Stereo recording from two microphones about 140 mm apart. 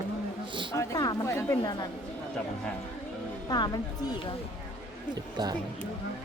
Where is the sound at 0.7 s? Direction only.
25° left (ahead or behind).